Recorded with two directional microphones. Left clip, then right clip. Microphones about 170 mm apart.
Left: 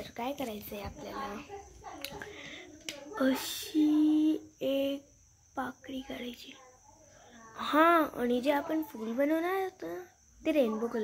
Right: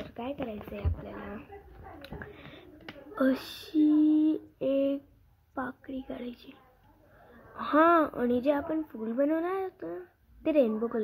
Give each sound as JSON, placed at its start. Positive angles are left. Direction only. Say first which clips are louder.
{"t": 0.1, "sound": "speech", "louder": "left 1 dB", "side_deg": -10}
{"t": 2.0, "sound": "a sound", "louder": "left 3 dB", "side_deg": -20}
{"t": 3.2, "sound": "speech", "louder": "right 2 dB", "side_deg": -20}